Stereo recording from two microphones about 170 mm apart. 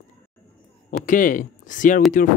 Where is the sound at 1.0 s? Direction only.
55° left (ahead or behind).